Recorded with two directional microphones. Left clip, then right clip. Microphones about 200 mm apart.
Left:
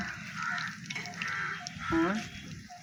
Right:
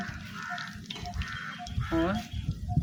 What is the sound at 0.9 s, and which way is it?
Crow, 5° right (ahead or behind).